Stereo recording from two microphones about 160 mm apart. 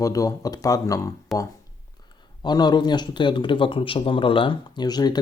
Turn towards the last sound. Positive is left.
turn(degrees=25)  # may be behind; listen again after turning